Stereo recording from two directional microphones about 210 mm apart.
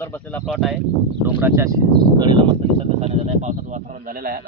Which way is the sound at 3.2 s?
35° right (ahead or behind).